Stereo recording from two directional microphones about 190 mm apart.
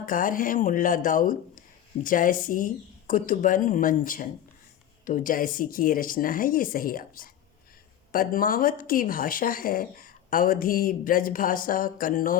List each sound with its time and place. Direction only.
0.0 s speech: 45° left (ahead or behind)